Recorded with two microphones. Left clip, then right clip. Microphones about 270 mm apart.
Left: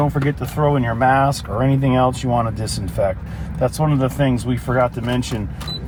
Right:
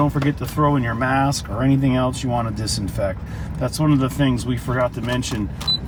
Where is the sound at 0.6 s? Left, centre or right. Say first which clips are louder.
Left 3 dB; centre.